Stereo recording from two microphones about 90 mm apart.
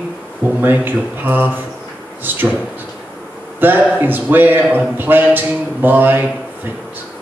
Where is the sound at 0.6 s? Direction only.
20° right (ahead or behind).